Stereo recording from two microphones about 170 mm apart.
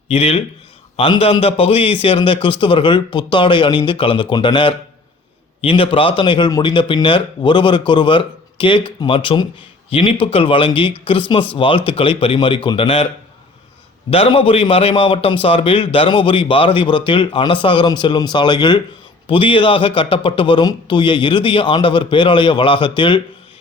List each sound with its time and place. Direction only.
0.1 s a man's voice: 35° left (ahead or behind)
14.1 s a man's voice: 35° left (ahead or behind)